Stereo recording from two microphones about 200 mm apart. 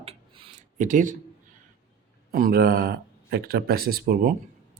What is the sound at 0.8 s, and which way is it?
Speech, 40° right (ahead or behind).